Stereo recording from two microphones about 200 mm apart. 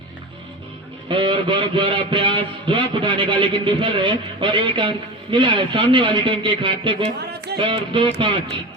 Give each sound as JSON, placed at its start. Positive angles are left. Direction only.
{"t": 1.0, "sound": "a man's voice", "side_deg": -25}